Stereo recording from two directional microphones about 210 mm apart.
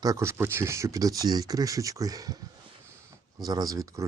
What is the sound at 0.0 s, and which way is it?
Speech, 15° right (ahead or behind).